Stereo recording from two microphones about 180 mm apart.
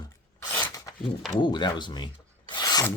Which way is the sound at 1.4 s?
25° left (ahead or behind).